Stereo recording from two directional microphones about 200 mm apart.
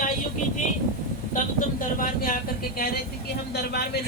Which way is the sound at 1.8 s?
40° left (ahead or behind).